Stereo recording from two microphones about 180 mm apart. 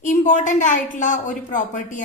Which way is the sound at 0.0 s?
45° left (ahead or behind).